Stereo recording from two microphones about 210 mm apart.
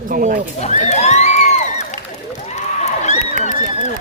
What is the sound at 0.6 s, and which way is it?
Crowd, 30° left (ahead or behind).